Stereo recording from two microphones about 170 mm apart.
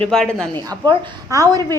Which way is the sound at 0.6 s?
25° right (ahead or behind).